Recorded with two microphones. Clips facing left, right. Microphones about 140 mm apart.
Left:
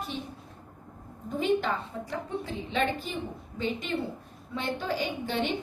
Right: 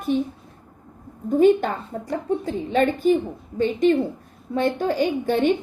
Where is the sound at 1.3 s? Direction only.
50° right (ahead or behind).